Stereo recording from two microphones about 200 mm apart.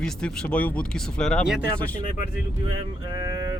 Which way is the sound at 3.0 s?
15° right (ahead or behind).